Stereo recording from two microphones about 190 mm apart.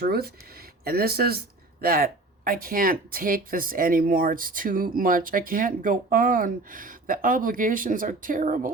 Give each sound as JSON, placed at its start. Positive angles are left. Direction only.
{"t": 0.0, "sound": "speech", "side_deg": -55}